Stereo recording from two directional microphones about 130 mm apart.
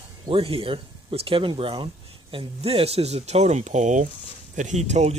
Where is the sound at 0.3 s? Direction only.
45° right (ahead or behind).